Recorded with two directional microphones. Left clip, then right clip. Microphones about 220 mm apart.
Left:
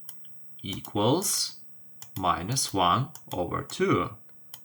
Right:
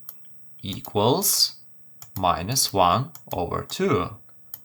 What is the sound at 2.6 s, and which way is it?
Speech, 55° right (ahead or behind).